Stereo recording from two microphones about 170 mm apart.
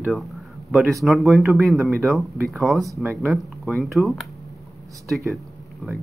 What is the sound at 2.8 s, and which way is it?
Speech, 15° right (ahead or behind).